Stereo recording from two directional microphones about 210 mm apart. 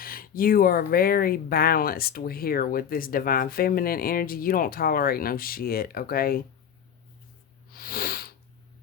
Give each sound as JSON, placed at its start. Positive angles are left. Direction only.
{"t": 0.0, "sound": "speech", "side_deg": 45}
{"t": 7.7, "sound": "sniff", "side_deg": 45}